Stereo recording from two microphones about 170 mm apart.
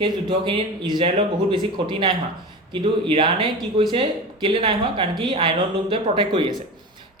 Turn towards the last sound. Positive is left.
turn(degrees=-30)  # may be behind; listen again after turning